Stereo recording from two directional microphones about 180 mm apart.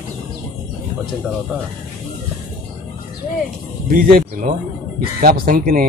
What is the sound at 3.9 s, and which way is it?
Speech, 55° right (ahead or behind).